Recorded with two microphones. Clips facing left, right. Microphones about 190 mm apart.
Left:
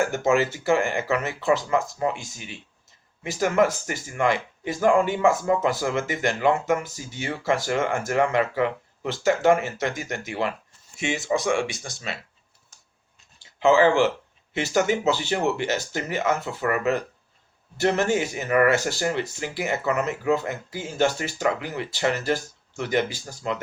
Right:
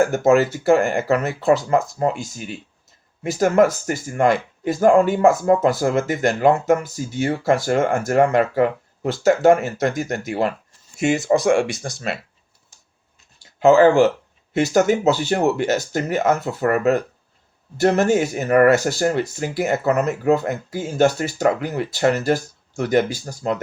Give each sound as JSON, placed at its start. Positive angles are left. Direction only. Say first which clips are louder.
{"t": 0.0, "sound": "speech", "louder": "right 6 dB", "side_deg": -40}
{"t": 13.4, "sound": "speech", "louder": "right 5 dB", "side_deg": -45}